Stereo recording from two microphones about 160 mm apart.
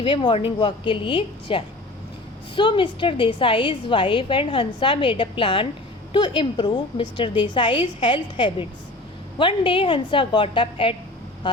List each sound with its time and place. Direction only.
0.0 s a woman's voice: 30° left (ahead or behind)